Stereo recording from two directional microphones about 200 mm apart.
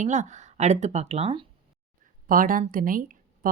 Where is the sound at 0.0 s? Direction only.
35° right (ahead or behind).